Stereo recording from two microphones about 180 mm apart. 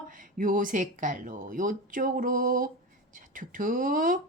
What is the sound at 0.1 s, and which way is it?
A woman's voice, 50° right (ahead or behind).